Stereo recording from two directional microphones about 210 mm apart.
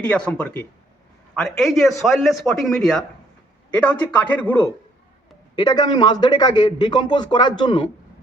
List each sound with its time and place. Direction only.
0.0 s a man's voice: 5° left (ahead or behind)
5.5 s a man's voice: 20° left (ahead or behind)